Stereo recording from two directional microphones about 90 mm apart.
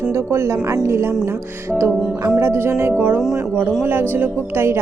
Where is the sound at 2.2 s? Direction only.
25° right (ahead or behind).